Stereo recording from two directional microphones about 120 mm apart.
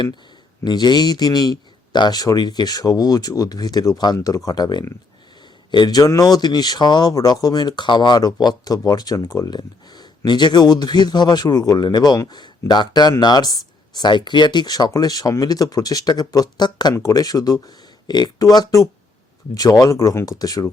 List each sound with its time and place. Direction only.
0.6 s speech: 35° left (ahead or behind)